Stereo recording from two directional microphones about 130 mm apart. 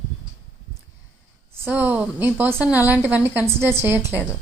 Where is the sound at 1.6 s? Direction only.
15° right (ahead or behind).